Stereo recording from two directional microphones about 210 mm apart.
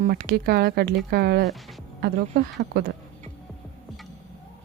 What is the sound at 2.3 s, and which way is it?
Speech, 50° right (ahead or behind).